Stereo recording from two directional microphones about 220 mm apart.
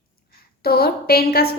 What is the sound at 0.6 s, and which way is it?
Speech, 45° left (ahead or behind).